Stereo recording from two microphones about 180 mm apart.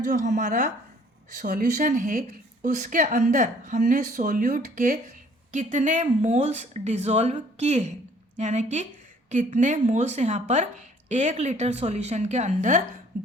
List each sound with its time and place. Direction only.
0.1 s speech: 45° right (ahead or behind)